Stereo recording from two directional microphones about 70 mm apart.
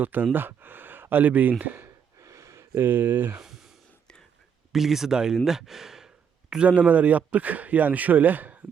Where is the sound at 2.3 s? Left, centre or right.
Right.